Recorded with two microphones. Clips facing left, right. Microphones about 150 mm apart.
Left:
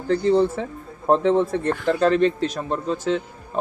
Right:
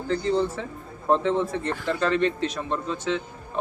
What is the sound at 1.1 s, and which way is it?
A man's voice, 40° left (ahead or behind).